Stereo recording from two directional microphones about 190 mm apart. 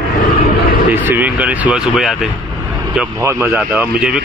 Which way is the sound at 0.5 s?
55° left (ahead or behind).